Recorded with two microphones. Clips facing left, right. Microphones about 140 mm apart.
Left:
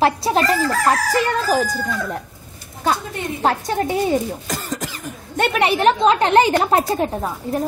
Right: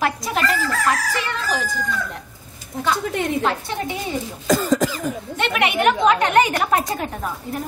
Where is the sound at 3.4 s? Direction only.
45° left (ahead or behind).